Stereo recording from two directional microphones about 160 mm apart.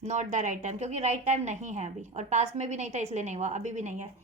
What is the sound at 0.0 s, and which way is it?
A woman's voice, 50° right (ahead or behind).